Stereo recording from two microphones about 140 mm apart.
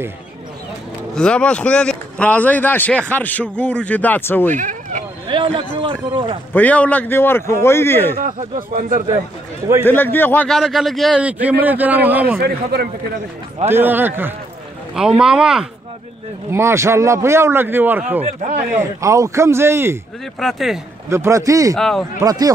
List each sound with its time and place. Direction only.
1.1 s speech: 5° left (ahead or behind)
4.6 s a sound: 65° right (ahead or behind)
5.3 s speech: 35° right (ahead or behind)
6.5 s speech: 10° left (ahead or behind)
8.5 s speech: 65° right (ahead or behind)
9.8 s speech: 15° left (ahead or behind)
10.6 s a man's voice: centre (ahead or behind)
11.2 s a man's voice: 10° right (ahead or behind)
13.7 s a man's voice: 15° right (ahead or behind)
16.4 s a man's voice: 20° right (ahead or behind)
20.3 s a man's voice: centre (ahead or behind)
21.1 s a man's voice: 20° right (ahead or behind)
21.7 s a man's voice: 5° left (ahead or behind)
22.2 s a man's voice: 25° right (ahead or behind)